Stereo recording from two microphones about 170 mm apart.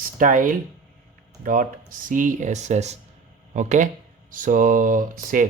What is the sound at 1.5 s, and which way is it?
Speech, 50° right (ahead or behind).